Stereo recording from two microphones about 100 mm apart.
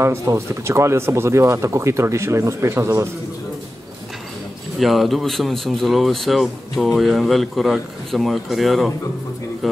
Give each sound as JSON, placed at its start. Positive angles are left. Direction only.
{"t": 0.0, "sound": "speech", "side_deg": -30}
{"t": 4.7, "sound": "speech", "side_deg": 0}